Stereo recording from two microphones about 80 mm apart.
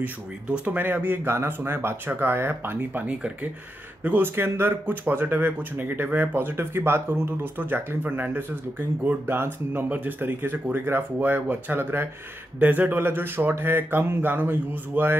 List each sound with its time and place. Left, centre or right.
0.0 s speech: right